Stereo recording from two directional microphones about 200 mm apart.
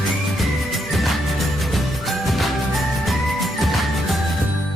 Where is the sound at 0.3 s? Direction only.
Centre (ahead or behind).